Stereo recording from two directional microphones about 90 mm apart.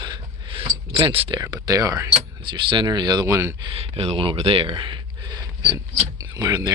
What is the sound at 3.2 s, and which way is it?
Speech, 25° right (ahead or behind).